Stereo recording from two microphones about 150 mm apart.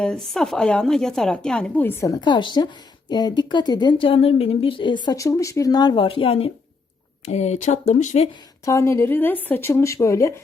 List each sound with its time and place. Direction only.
0.0 s speech: 5° left (ahead or behind)
2.2 s speech: 30° left (ahead or behind)
7.3 s speech: 45° left (ahead or behind)
8.6 s speech: 20° left (ahead or behind)